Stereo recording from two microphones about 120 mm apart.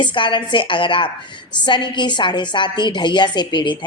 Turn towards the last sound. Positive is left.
turn(degrees=40)  # may be behind; listen again after turning